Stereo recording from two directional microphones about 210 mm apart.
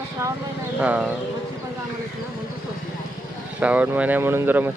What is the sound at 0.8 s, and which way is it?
Speech, 5° right (ahead or behind).